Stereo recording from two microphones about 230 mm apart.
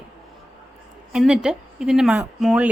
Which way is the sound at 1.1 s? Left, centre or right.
Centre.